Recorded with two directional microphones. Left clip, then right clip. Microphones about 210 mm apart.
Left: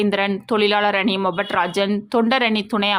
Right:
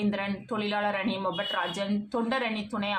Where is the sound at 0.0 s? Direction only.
50° left (ahead or behind).